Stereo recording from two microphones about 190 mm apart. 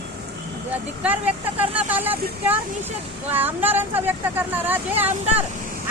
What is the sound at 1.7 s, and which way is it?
Speech, 10° right (ahead or behind).